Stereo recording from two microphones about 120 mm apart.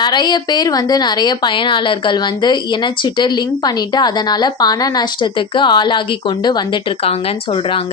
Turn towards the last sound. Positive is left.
turn(degrees=50)  # may be behind; listen again after turning